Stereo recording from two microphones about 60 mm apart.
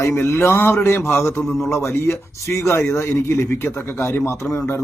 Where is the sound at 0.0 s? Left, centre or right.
Left.